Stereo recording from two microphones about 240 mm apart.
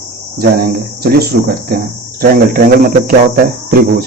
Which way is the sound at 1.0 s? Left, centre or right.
Right.